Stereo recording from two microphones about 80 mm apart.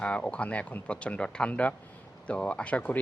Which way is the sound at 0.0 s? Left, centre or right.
Centre.